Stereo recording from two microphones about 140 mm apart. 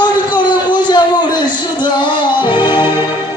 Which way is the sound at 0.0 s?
30° left (ahead or behind).